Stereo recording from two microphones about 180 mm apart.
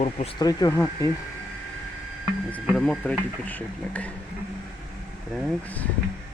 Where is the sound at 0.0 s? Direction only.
35° left (ahead or behind).